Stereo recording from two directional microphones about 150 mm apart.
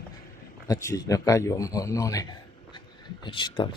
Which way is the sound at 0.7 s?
20° left (ahead or behind).